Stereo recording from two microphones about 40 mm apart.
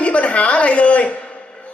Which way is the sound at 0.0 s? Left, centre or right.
Left.